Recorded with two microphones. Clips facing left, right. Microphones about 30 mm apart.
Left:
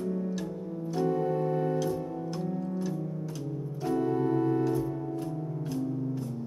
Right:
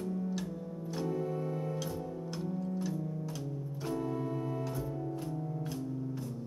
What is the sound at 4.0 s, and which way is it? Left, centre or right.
Organ, left.